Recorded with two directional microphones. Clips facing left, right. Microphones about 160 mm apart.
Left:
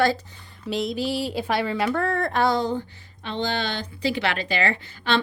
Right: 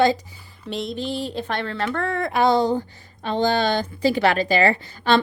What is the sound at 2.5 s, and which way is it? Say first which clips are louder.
A woman's voice: right 5 dB; 35° right (ahead or behind).